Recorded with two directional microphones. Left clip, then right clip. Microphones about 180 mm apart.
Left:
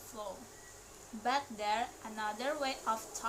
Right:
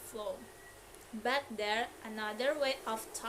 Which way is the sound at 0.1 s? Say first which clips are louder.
Right 4 dB; 15° right (ahead or behind).